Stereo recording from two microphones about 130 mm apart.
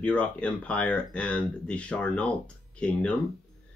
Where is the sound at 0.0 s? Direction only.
10° left (ahead or behind).